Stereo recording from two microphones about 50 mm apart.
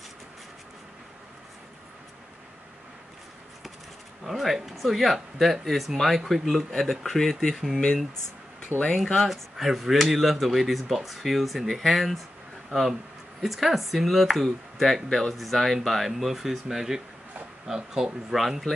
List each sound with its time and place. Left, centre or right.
4.3 s speech: centre
8.5 s a sound: centre
8.9 s speech: centre
13.4 s speech: centre